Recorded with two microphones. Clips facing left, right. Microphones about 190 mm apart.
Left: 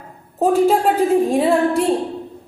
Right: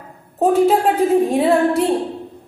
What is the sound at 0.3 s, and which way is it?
A woman's voice, centre (ahead or behind).